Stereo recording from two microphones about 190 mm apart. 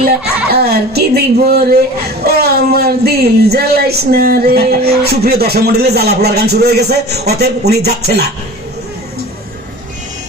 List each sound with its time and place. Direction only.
0.5 s speech: 55° right (ahead or behind)